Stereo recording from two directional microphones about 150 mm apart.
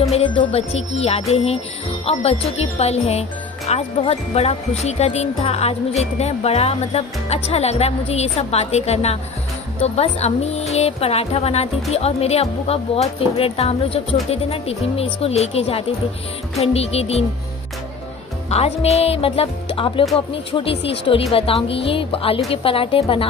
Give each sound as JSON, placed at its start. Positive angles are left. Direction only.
{"t": 0.1, "sound": "speech", "side_deg": 40}
{"t": 18.5, "sound": "speech", "side_deg": 45}